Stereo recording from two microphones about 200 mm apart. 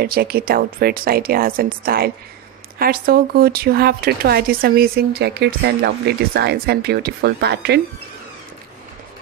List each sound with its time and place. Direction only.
0.0 s speech: 50° right (ahead or behind)